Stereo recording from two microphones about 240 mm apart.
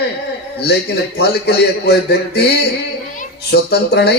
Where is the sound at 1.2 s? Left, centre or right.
Left.